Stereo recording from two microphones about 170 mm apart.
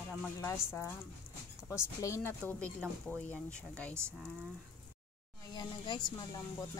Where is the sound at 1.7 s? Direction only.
15° left (ahead or behind).